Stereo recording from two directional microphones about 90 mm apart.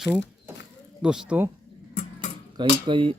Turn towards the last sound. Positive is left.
turn(degrees=-65)  # may be behind; listen again after turning